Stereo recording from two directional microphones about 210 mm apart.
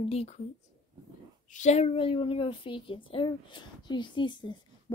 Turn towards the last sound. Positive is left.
turn(degrees=20)  # may be behind; listen again after turning